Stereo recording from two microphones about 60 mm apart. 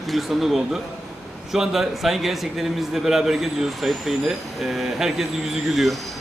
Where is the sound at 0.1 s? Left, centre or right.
Centre.